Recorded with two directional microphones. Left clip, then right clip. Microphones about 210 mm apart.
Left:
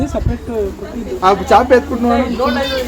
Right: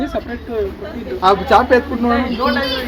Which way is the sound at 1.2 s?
10° right (ahead or behind).